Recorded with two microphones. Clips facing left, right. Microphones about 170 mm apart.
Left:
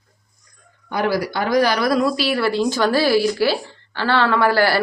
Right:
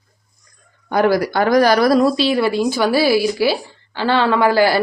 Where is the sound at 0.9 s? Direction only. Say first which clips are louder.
Right 5 dB; 50° right (ahead or behind).